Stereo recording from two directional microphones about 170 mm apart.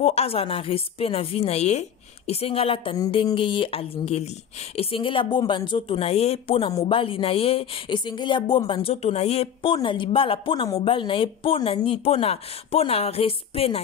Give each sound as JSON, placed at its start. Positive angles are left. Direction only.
{"t": 0.0, "sound": "speech", "side_deg": 35}